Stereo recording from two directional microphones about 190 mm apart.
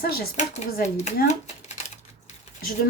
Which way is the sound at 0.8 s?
35° left (ahead or behind).